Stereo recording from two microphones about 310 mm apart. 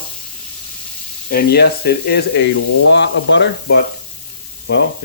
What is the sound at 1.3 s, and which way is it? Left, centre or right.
Speech, left.